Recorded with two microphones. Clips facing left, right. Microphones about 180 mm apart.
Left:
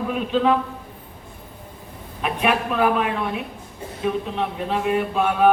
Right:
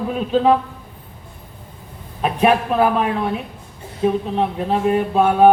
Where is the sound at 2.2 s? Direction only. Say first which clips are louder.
Right 5 dB; 35° right (ahead or behind).